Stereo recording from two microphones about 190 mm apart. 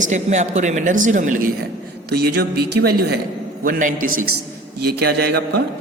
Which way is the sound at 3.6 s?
45° right (ahead or behind).